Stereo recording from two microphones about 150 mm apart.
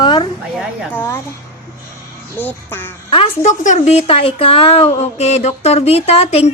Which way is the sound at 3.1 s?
35° left (ahead or behind).